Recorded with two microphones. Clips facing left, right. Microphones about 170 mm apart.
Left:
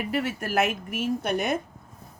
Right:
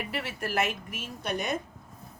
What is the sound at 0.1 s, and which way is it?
A woman's voice, 45° left (ahead or behind).